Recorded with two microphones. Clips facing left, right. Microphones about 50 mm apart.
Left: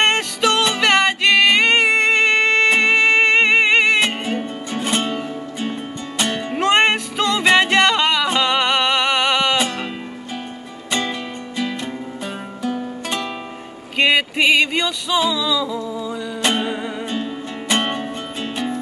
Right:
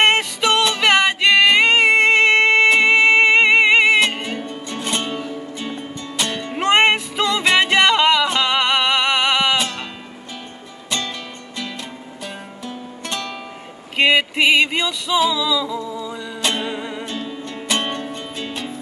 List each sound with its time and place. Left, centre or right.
0.0 s music: centre
4.0 s music: centre
6.6 s music: centre
13.9 s music: centre
16.7 s music: centre
17.2 s music: centre